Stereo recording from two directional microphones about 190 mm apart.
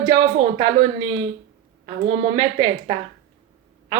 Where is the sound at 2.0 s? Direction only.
30° right (ahead or behind).